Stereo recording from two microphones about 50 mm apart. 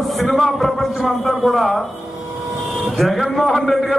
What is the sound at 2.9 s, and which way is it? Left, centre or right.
A man's voice, centre.